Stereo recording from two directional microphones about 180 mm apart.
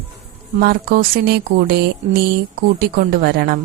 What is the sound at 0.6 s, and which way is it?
A woman's voice, 60° right (ahead or behind).